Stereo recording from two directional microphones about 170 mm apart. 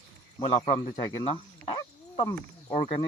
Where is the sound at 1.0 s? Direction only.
30° left (ahead or behind).